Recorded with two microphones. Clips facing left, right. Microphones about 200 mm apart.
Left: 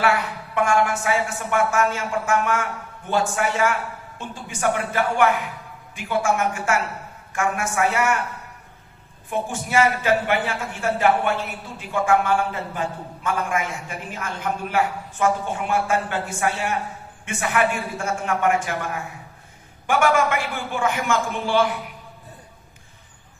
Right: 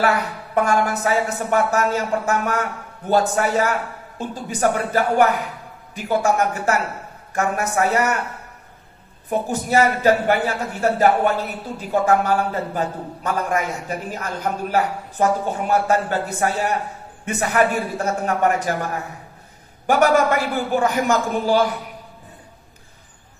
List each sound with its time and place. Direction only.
0.0 s a woman's voice: 40° right (ahead or behind)
9.3 s a woman's voice: 40° right (ahead or behind)